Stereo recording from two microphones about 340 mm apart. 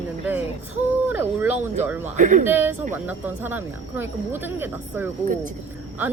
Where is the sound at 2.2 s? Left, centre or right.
Right.